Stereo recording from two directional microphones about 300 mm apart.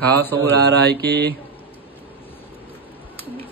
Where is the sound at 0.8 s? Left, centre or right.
Right.